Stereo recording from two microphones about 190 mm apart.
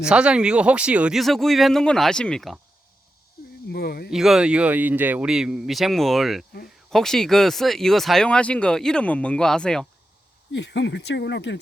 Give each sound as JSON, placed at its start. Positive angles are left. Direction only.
{"t": 0.0, "sound": "speech", "side_deg": -5}
{"t": 3.7, "sound": "speech", "side_deg": 55}
{"t": 4.1, "sound": "speech", "side_deg": 0}
{"t": 10.5, "sound": "speech", "side_deg": 70}